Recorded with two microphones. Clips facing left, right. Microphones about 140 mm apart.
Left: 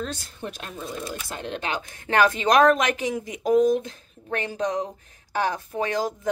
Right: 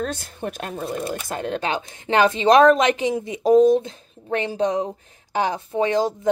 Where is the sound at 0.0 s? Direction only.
55° right (ahead or behind).